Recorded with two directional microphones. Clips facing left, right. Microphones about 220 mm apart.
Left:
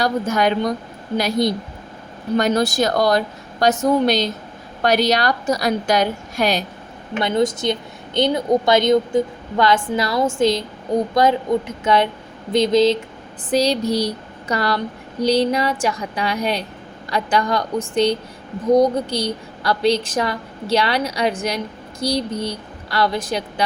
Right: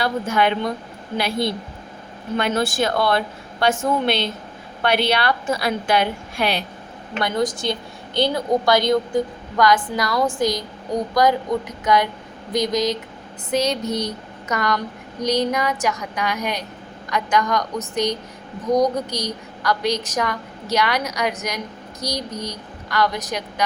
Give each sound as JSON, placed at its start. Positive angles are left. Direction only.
{"t": 0.0, "sound": "a woman's voice", "side_deg": 40}
{"t": 7.2, "sound": "a woman's voice", "side_deg": 25}